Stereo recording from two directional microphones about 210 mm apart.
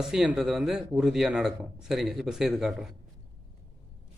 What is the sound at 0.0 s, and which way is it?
Speech, 5° right (ahead or behind).